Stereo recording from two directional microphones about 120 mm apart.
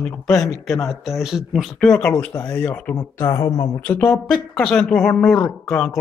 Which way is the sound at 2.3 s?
20° left (ahead or behind).